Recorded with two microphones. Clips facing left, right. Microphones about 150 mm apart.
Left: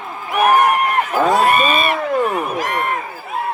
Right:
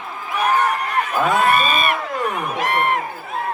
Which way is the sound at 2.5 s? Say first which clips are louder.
Right 1 dB; 70° right (ahead or behind).